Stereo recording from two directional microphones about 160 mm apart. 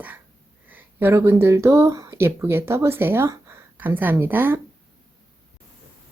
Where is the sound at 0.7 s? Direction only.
15° right (ahead or behind).